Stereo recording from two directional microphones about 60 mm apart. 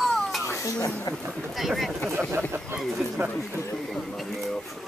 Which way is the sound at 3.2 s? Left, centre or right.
Right.